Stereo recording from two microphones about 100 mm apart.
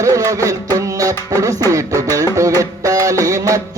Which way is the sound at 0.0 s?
30° right (ahead or behind).